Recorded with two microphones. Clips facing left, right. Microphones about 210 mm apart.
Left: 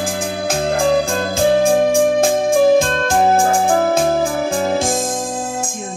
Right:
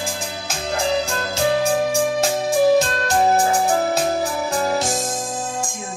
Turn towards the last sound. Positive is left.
turn(degrees=50)  # may be behind; listen again after turning